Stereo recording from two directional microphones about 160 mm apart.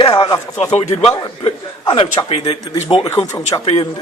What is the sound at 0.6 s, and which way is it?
Speech, 45° left (ahead or behind).